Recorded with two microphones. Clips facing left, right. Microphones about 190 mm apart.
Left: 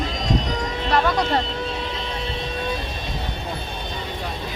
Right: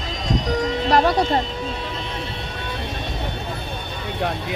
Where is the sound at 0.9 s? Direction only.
40° right (ahead or behind).